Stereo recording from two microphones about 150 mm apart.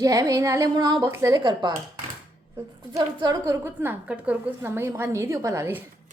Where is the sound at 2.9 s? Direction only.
25° right (ahead or behind).